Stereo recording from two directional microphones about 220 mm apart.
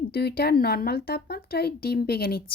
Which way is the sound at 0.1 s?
45° left (ahead or behind).